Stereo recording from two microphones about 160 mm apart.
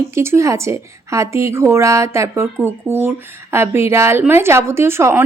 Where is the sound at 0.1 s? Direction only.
15° right (ahead or behind).